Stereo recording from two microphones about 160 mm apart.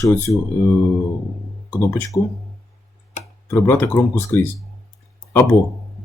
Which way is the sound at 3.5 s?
10° left (ahead or behind).